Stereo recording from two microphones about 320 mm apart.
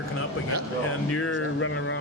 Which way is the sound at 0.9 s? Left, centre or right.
Left.